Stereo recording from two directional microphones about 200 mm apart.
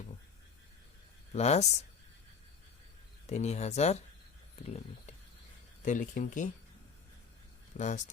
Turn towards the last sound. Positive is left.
turn(degrees=40)  # may be behind; listen again after turning